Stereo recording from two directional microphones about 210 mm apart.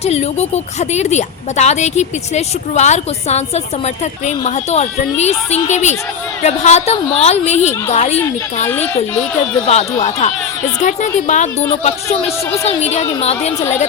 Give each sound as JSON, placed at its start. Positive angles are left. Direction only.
{"t": 0.0, "sound": "a woman's voice", "side_deg": 30}
{"t": 9.6, "sound": "a woman's voice", "side_deg": 30}